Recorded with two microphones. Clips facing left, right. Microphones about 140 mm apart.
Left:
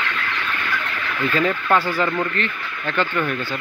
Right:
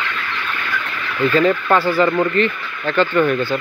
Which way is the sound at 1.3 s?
20° right (ahead or behind).